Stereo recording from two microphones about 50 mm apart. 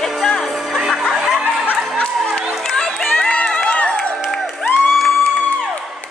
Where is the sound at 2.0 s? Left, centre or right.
Left.